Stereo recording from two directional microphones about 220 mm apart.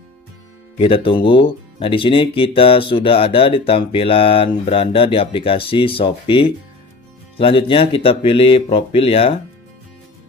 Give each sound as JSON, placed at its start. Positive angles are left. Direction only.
{"t": 0.7, "sound": "speech", "side_deg": 25}